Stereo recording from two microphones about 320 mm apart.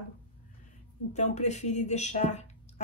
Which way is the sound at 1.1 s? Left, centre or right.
Left.